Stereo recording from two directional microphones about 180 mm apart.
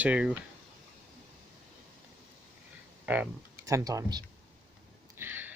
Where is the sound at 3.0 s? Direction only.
10° right (ahead or behind).